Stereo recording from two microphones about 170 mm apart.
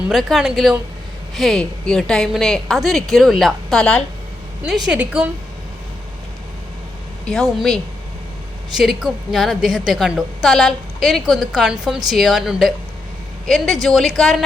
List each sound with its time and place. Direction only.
0.1 s a woman's voice: centre (ahead or behind)
4.9 s a woman's voice: 10° right (ahead or behind)
7.3 s a woman's voice: 5° left (ahead or behind)
13.8 s a woman's voice: centre (ahead or behind)